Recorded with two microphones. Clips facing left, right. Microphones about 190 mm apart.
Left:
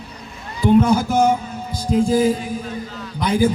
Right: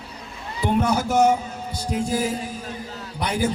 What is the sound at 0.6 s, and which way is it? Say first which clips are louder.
Speech: left 7 dB; 70° right (ahead or behind).